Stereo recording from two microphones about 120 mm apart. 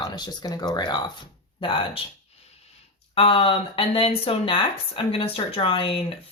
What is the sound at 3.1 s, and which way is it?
Speech, 50° left (ahead or behind).